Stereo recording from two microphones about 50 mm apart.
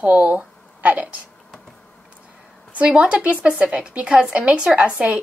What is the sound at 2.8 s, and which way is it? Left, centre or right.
Speech, right.